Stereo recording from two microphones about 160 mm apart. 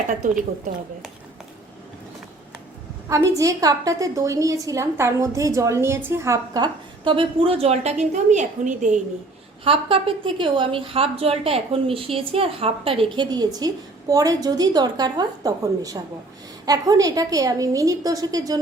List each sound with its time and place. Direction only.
3.1 s a woman's voice: 20° right (ahead or behind); by 9.0 s 50° right (ahead or behind)
9.6 s a woman's voice: 35° right (ahead or behind)